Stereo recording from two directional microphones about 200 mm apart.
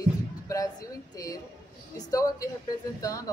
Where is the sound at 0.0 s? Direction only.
15° left (ahead or behind).